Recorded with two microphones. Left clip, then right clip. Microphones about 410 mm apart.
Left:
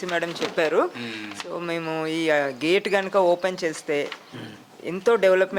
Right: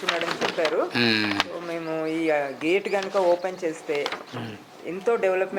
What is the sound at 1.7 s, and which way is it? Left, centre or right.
Speech, left.